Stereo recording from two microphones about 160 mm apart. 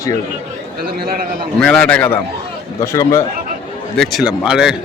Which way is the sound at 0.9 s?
70° right (ahead or behind).